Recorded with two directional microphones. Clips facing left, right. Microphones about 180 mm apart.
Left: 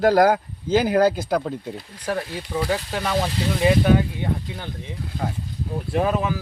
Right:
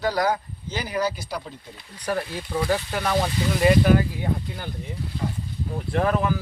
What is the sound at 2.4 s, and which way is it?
Speech, 10° left (ahead or behind).